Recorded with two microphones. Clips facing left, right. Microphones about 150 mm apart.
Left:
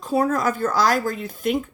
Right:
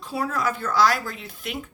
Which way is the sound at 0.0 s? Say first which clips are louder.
Left 6 dB; 45° left (ahead or behind).